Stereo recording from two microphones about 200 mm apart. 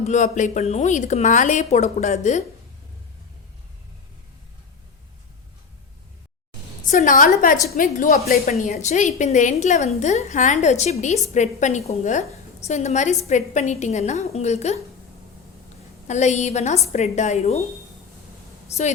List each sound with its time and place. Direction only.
0.0 s a woman's voice: 35° left (ahead or behind)
6.8 s a woman's voice: 40° left (ahead or behind)
16.0 s a woman's voice: 35° left (ahead or behind)